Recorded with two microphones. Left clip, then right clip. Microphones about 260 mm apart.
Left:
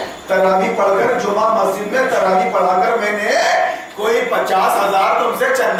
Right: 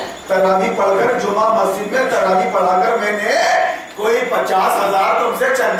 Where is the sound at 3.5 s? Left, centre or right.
Centre.